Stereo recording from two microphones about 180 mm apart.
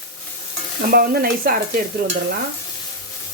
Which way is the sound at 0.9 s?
55° right (ahead or behind).